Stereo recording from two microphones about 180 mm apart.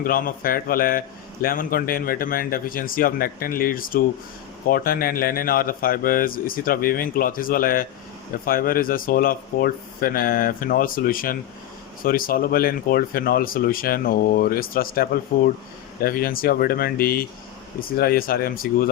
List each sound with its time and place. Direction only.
0.0 s a man's voice: 50° left (ahead or behind)